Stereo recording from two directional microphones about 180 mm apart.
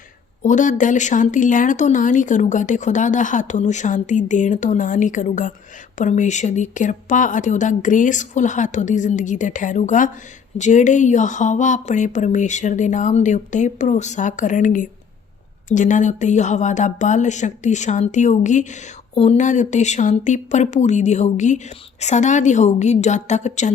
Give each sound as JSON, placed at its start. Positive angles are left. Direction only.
{"t": 0.4, "sound": "speech", "side_deg": 45}